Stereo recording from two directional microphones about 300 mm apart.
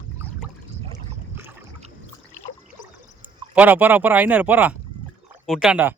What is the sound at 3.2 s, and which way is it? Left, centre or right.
Speech, centre.